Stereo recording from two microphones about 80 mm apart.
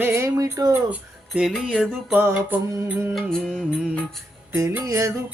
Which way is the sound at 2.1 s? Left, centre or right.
Right.